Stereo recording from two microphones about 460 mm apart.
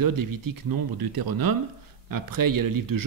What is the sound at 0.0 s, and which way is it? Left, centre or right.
A man's voice, right.